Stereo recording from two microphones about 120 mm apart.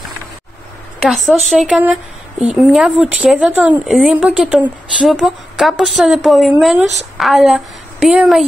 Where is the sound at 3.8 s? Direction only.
Centre (ahead or behind).